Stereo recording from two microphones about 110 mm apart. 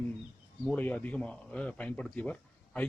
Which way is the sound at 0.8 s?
15° left (ahead or behind).